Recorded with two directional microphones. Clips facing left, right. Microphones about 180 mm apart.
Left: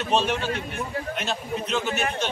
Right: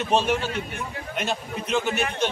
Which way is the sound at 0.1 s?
10° right (ahead or behind).